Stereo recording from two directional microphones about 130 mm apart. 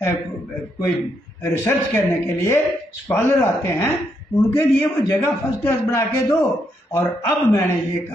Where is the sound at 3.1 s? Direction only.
20° left (ahead or behind).